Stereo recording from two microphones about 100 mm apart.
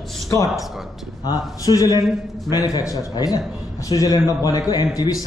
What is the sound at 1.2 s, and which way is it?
A man's voice, 40° left (ahead or behind).